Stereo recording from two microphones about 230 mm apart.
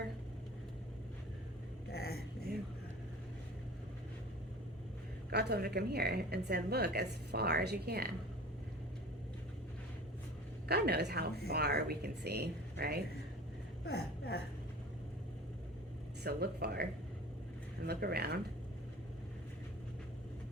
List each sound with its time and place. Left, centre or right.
1.9 s vehicle: left
5.3 s speech: right
10.7 s speech: right
13.8 s a woman's voice: left
16.2 s speech: right
17.8 s speech: right